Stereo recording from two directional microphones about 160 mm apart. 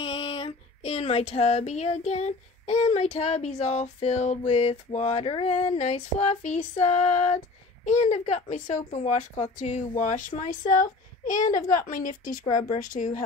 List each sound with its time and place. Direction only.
0.0 s female singing: 30° left (ahead or behind); by 9.8 s 50° left (ahead or behind)
10.0 s a woman's voice: 55° left (ahead or behind)
12.5 s female singing: 50° left (ahead or behind)